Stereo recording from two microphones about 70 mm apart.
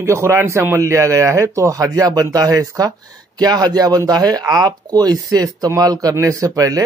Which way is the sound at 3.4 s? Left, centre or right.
Right.